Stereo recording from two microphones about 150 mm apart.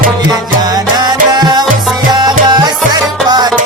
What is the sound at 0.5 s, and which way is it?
Music, 25° right (ahead or behind).